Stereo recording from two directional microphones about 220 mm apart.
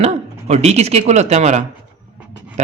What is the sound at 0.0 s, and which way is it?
Speech, 30° right (ahead or behind).